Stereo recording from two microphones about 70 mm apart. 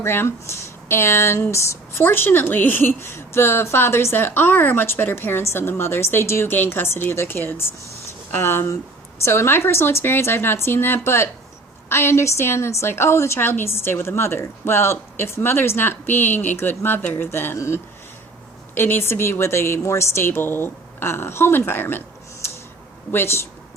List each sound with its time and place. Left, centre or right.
0.0 s a woman's voice: left